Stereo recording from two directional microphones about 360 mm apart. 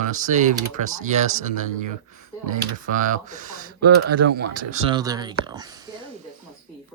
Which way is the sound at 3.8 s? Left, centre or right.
Right.